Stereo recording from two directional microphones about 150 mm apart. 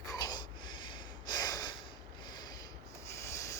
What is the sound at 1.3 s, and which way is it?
Gasp, 25° left (ahead or behind).